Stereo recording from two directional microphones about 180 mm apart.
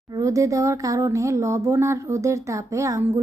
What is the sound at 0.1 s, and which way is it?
A woman's voice, 20° right (ahead or behind).